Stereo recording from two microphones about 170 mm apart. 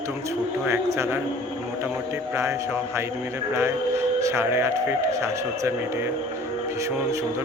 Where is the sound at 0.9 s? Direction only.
15° right (ahead or behind).